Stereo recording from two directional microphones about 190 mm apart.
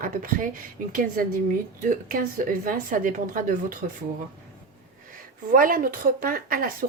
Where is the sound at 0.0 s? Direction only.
45° right (ahead or behind).